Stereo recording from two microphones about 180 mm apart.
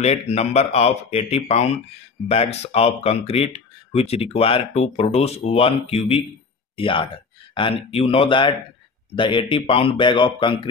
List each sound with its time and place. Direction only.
0.0 s a man's voice: 35° left (ahead or behind)